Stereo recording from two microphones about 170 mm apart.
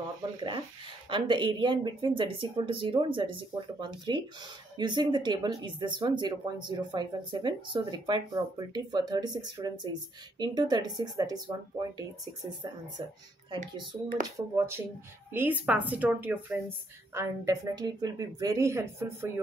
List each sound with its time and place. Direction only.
0.4 s speech: 30° right (ahead or behind)
14.2 s speech: 15° right (ahead or behind)